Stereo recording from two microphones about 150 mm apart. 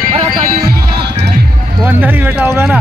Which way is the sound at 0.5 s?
90° right.